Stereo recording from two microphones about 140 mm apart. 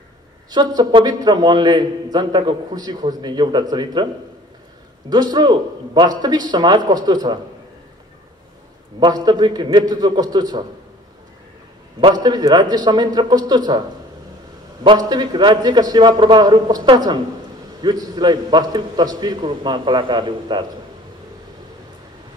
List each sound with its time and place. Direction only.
0.5 s a man's voice: 30° right (ahead or behind)
5.1 s a man's voice: 30° right (ahead or behind)
9.0 s a man's voice: 30° right (ahead or behind)
12.0 s a man's voice: 30° right (ahead or behind)